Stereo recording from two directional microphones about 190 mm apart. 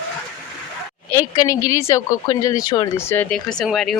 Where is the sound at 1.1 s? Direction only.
15° left (ahead or behind).